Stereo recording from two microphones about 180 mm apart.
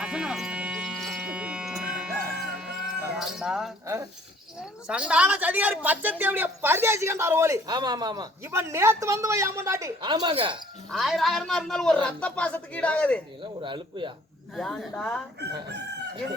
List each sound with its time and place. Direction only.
0.0 s music: 5° right (ahead or behind)
4.9 s speech: 5° right (ahead or behind); by 10.6 s 30° right (ahead or behind)
10.9 s speech: centre (ahead or behind)
13.4 s speech: 25° right (ahead or behind)
14.5 s speech: centre (ahead or behind)